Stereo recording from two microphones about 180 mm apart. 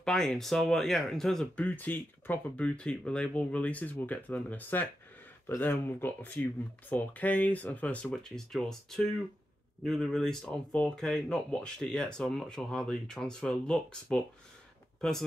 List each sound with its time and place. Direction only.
0.0 s speech: 5° left (ahead or behind)